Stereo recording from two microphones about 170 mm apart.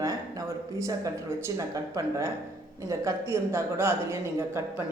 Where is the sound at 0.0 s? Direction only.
20° right (ahead or behind).